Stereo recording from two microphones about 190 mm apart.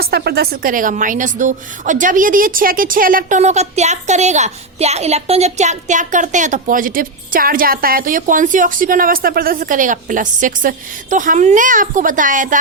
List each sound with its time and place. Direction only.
0.0 s a woman's voice: 55° right (ahead or behind)